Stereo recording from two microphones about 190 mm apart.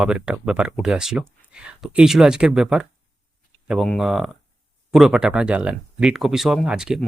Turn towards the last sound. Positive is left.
turn(degrees=-5)  # may be behind; listen again after turning